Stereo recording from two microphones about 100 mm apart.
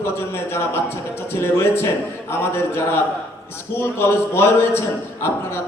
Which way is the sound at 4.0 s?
25° left (ahead or behind).